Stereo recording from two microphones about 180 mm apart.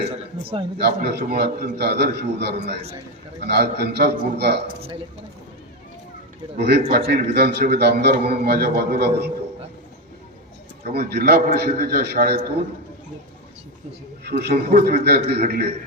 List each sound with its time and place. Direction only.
0.8 s a man's voice: 65° right (ahead or behind)
1.2 s a man's voice: 50° right (ahead or behind)
6.6 s a man's voice: 65° right (ahead or behind)
10.8 s a man's voice: 60° right (ahead or behind)
14.3 s a man's voice: 60° right (ahead or behind)